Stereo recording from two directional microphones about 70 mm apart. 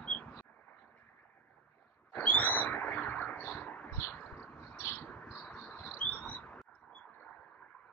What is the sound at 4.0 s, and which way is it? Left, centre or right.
Vehicle, left.